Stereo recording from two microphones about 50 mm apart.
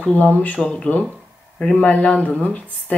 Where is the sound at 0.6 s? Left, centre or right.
Centre.